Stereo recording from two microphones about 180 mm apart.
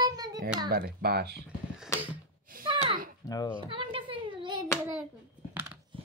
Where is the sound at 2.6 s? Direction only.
30° right (ahead or behind).